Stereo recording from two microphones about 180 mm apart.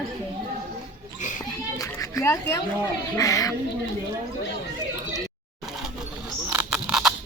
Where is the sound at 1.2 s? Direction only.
45° left (ahead or behind).